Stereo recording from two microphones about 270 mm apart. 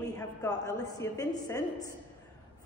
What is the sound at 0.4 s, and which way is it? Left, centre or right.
A woman's voice, centre.